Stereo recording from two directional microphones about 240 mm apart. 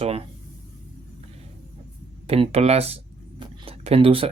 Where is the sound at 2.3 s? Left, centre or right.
Right.